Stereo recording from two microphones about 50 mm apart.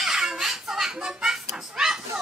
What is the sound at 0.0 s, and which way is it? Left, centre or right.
Children playing, centre.